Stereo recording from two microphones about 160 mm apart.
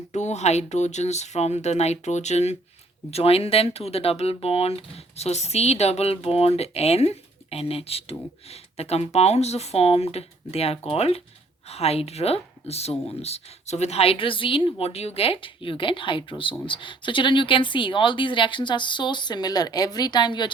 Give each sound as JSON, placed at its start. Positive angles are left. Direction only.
{"t": 0.1, "sound": "speech", "side_deg": 45}